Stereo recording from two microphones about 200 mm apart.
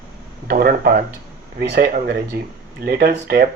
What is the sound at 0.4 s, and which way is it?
Speech, 45° right (ahead or behind).